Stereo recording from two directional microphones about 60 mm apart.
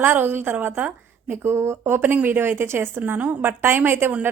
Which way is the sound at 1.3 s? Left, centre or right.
Right.